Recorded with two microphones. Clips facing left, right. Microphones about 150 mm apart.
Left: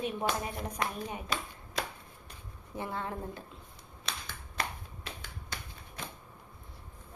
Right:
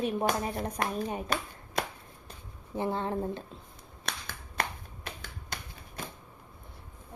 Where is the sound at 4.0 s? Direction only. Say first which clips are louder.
Right 2 dB; 50° right (ahead or behind).